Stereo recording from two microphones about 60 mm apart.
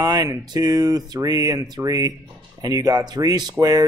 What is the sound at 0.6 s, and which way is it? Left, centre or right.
Speech, right.